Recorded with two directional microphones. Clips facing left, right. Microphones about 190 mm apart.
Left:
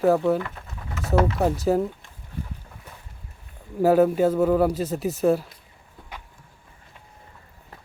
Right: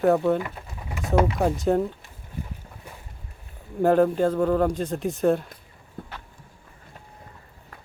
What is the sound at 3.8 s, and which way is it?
Speech, 5° left (ahead or behind).